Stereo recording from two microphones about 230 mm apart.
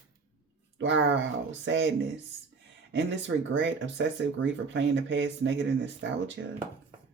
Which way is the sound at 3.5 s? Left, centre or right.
Right.